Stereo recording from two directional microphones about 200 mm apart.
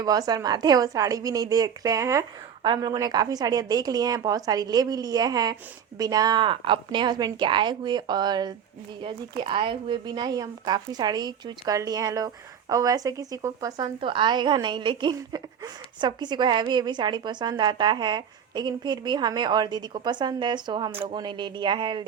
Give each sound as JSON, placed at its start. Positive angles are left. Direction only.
{"t": 0.0, "sound": "a woman's voice", "side_deg": -20}